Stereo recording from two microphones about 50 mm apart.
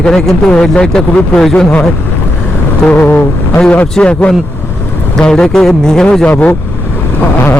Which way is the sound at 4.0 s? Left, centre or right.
Left.